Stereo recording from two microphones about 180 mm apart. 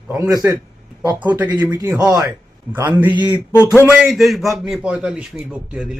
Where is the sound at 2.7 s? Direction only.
10° right (ahead or behind).